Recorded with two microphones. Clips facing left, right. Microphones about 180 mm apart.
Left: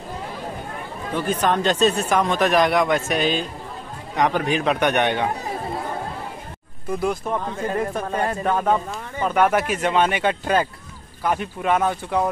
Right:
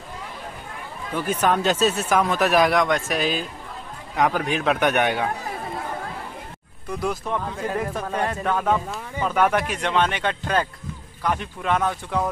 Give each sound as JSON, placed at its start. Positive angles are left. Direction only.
{"t": 1.1, "sound": "speech", "side_deg": -10}
{"t": 7.0, "sound": "speech", "side_deg": 5}